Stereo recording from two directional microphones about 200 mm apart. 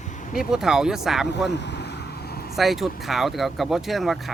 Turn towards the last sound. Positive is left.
turn(degrees=0)  # may be behind; listen again after turning